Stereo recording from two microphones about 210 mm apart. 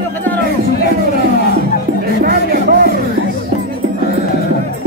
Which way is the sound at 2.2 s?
45° right (ahead or behind).